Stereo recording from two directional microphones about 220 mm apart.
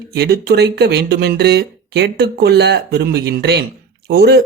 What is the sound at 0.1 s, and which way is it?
Speech, 45° right (ahead or behind).